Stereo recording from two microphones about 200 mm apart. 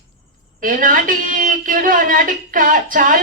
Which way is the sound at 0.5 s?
45° right (ahead or behind).